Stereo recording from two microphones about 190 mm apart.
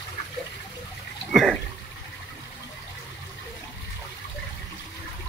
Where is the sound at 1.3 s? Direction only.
Centre (ahead or behind).